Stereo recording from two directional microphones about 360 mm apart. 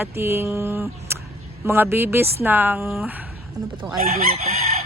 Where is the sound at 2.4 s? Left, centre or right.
Centre.